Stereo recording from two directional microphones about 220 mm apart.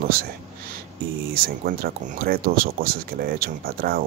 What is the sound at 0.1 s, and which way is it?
Speech, 40° right (ahead or behind).